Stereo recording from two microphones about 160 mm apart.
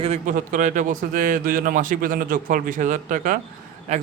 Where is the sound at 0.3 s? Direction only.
55° right (ahead or behind).